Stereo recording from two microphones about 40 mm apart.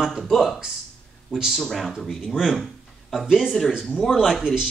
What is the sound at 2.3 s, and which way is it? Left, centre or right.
Speech, centre.